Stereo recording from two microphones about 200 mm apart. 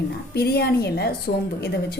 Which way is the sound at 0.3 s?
50° left (ahead or behind).